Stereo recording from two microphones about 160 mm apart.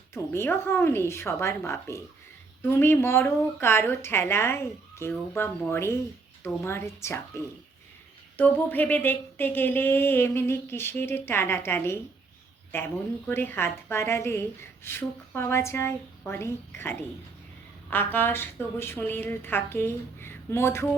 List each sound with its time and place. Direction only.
0.1 s a woman's voice: 15° left (ahead or behind)